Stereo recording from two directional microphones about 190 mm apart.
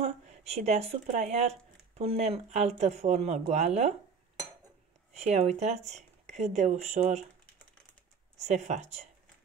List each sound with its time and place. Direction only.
0.0 s speech: 35° right (ahead or behind)
5.1 s speech: 35° right (ahead or behind)
8.4 s speech: 35° right (ahead or behind)